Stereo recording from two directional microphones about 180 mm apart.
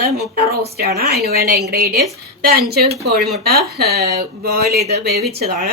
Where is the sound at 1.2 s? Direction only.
60° right (ahead or behind).